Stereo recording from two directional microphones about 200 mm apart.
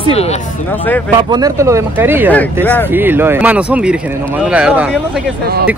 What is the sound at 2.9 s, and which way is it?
Speech, 10° right (ahead or behind).